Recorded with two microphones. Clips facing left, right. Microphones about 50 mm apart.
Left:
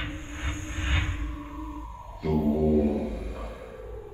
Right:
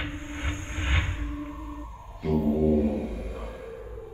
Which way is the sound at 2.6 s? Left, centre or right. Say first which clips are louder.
Even; right.